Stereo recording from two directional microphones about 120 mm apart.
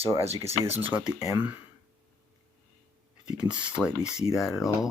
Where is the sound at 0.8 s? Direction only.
15° right (ahead or behind).